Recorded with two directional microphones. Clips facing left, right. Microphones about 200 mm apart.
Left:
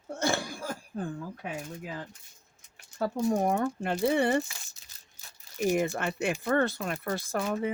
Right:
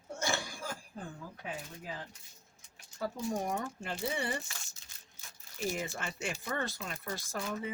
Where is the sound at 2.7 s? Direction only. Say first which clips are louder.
Left 8 dB; 60° left (ahead or behind).